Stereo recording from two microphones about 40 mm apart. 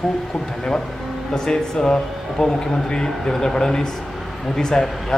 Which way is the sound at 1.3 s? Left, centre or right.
Centre.